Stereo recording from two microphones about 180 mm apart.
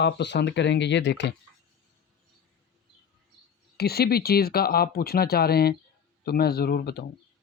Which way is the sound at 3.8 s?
60° left (ahead or behind).